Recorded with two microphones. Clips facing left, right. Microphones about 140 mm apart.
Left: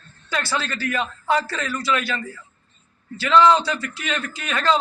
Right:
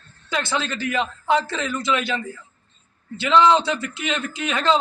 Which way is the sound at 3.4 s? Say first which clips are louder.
Left 1 dB; 20° right (ahead or behind).